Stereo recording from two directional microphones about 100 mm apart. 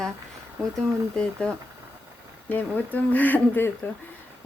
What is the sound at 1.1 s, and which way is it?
Speech, 10° left (ahead or behind).